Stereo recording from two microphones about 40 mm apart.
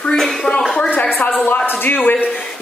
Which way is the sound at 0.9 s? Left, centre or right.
Left.